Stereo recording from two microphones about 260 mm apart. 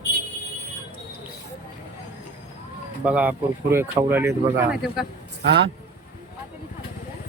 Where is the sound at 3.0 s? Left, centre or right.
Centre.